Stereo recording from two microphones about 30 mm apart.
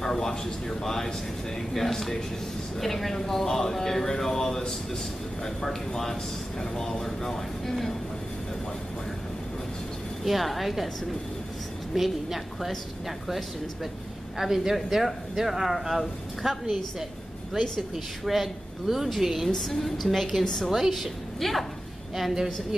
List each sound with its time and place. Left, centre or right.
0.0 s a sound: centre
0.7 s speech: centre
10.2 s speech: centre
11.9 s speech: centre
14.4 s speech: centre
17.6 s speech: centre
19.5 s speech: centre
21.4 s speech: centre
22.3 s a woman's voice: right